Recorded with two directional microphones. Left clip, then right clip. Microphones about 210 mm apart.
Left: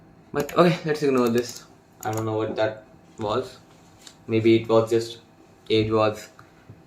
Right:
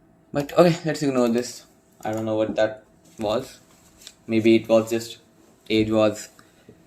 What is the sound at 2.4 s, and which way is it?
Speech, 50° right (ahead or behind).